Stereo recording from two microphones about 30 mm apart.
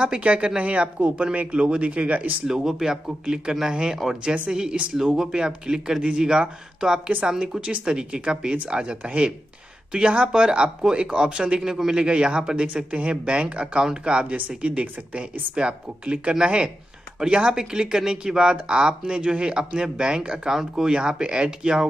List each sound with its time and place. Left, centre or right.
0.2 s speech: right
2.4 s speech: centre
4.9 s speech: centre; by 11.6 s right
11.6 s speech: centre
12.0 s speech: right